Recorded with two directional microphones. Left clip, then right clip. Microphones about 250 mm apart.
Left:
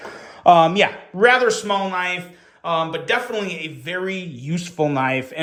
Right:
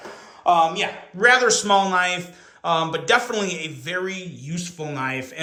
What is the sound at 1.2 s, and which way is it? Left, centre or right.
A man's voice, centre.